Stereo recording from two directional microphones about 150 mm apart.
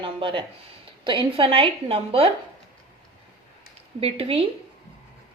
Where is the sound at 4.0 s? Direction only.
40° right (ahead or behind).